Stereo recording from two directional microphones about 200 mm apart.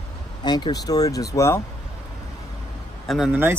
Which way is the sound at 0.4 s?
20° left (ahead or behind).